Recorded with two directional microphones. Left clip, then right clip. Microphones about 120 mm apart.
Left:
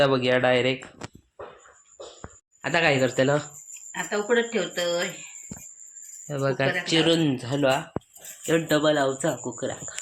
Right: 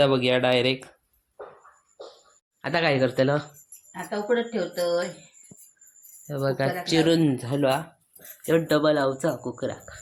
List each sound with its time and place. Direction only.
0.0 s speech: 20° right (ahead or behind)
2.6 s speech: 10° right (ahead or behind)
6.2 s speech: 10° right (ahead or behind)
6.8 s speech: 30° right (ahead or behind)
7.3 s speech: 20° right (ahead or behind)